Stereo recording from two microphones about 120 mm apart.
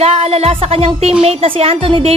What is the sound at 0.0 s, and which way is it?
A woman's voice, 60° right (ahead or behind).